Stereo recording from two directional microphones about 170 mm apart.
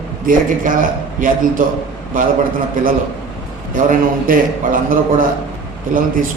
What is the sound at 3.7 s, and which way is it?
A man's voice, 55° right (ahead or behind).